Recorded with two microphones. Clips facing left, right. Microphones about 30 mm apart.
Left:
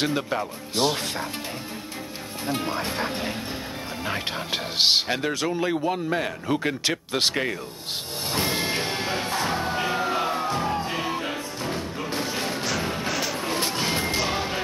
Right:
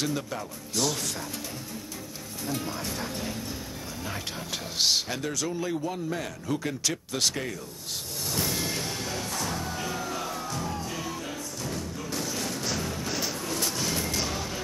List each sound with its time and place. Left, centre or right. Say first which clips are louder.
0.0 s speech: left 6 dB; left
2.4 s speech: left 6 dB; left
8.3 s music: left 5 dB; left